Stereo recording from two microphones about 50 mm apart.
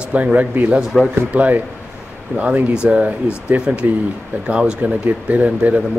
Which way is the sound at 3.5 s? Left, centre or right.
Right.